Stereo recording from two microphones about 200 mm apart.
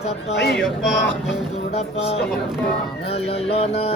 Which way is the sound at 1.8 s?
30° left (ahead or behind).